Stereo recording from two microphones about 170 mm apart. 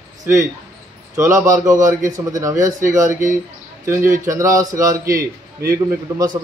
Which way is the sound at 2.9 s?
20° right (ahead or behind).